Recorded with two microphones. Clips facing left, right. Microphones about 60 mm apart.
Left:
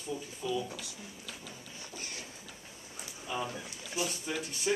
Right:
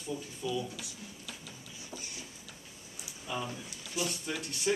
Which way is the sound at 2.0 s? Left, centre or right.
Left.